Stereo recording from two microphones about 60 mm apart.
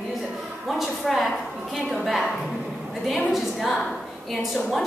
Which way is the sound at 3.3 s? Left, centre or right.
Centre.